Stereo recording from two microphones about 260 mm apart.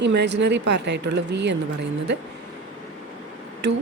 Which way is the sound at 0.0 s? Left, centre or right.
Right.